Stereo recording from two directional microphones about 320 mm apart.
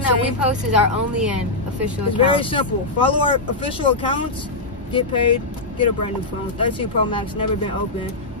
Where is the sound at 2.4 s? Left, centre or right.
Centre.